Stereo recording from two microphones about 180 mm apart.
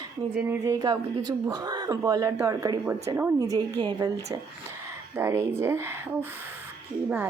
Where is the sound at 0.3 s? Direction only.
15° right (ahead or behind).